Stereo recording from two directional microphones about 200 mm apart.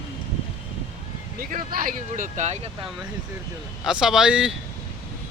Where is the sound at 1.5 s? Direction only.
45° right (ahead or behind).